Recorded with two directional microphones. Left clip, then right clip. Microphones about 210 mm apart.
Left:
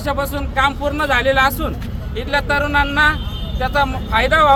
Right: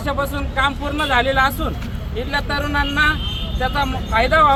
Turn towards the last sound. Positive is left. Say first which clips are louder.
# left 1 dB
turn(degrees=15)  # may be behind; listen again after turning